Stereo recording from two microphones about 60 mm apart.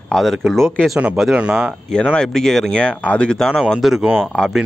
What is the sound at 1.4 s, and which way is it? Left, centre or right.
Speech, centre.